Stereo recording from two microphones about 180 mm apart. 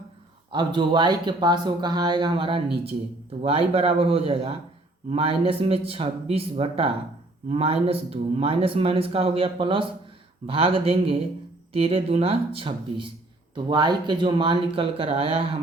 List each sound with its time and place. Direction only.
0.5 s speech: 25° right (ahead or behind)